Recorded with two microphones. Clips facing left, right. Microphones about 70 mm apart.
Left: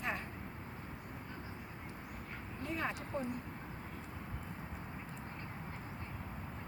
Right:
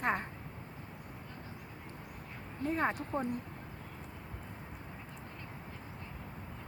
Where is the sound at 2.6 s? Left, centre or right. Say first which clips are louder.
Right 7 dB; right.